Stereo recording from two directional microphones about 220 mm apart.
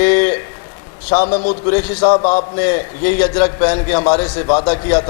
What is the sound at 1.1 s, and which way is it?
A man's voice, 35° left (ahead or behind).